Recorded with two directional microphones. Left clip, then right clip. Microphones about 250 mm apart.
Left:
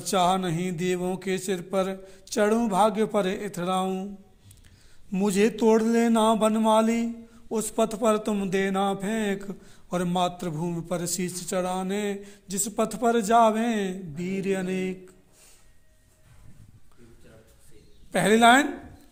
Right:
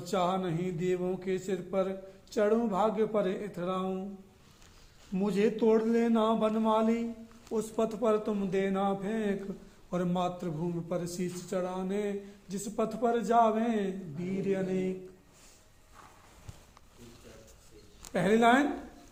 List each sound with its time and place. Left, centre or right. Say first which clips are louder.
0.0 s a man's voice: left 7 dB; left
5.1 s a man's voice: left 5 dB; left
18.1 s a man's voice: left 7 dB; left